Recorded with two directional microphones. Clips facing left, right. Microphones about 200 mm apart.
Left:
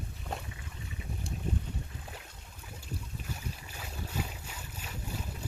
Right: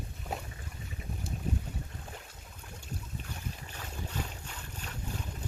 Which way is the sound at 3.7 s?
10° left (ahead or behind).